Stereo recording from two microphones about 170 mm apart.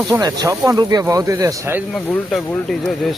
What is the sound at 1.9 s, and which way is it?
Speech, 5° left (ahead or behind).